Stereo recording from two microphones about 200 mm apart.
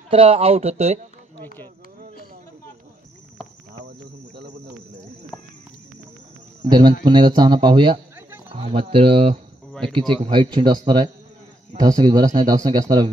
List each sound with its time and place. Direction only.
0.1 s speech: 30° right (ahead or behind)
6.6 s speech: 20° right (ahead or behind)
9.7 s cricket: 5° left (ahead or behind)
9.9 s speech: 25° right (ahead or behind)